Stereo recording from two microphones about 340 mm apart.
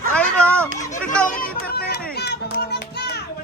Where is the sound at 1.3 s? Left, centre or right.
Left.